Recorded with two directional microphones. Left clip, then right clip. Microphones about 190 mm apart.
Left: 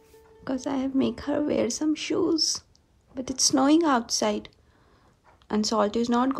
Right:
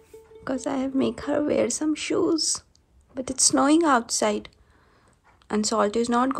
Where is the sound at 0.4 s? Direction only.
10° left (ahead or behind).